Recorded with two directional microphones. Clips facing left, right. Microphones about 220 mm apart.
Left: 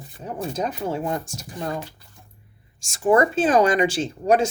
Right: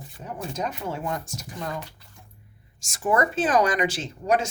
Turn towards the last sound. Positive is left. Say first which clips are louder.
# left 5 dB
turn(degrees=30)  # may be behind; listen again after turning